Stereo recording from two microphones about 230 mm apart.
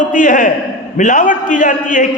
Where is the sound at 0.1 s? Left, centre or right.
Left.